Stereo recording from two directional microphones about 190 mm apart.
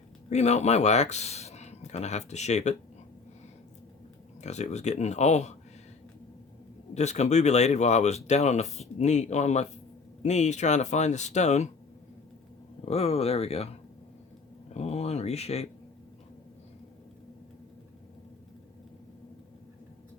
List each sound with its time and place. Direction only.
0.3 s speech: 35° left (ahead or behind)
4.4 s speech: 35° left (ahead or behind)
6.9 s speech: 35° left (ahead or behind)
12.8 s speech: 35° left (ahead or behind)
14.7 s speech: 35° left (ahead or behind)